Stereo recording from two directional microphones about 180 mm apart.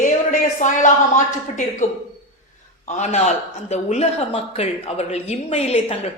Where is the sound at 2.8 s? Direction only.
40° left (ahead or behind).